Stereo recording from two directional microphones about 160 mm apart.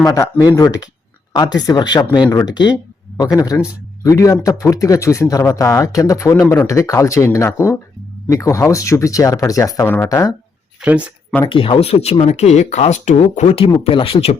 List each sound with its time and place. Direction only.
0.0 s speech: 25° left (ahead or behind)
10.8 s speech: 5° right (ahead or behind)
11.4 s speech: 30° left (ahead or behind)